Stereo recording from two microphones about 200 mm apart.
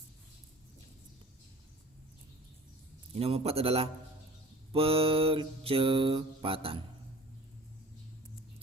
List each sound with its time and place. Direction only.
3.2 s mantra: 30° right (ahead or behind)